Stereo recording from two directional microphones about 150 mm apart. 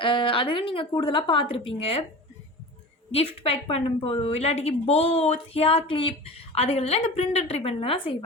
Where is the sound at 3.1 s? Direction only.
40° left (ahead or behind).